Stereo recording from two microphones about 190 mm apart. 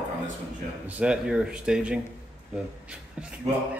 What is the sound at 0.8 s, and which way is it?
Speech, 5° right (ahead or behind).